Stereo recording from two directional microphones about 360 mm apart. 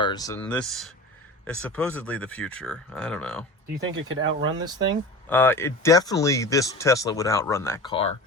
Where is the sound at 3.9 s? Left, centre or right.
Right.